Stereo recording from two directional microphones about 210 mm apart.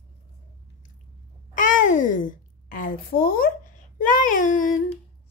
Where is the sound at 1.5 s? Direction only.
40° left (ahead or behind).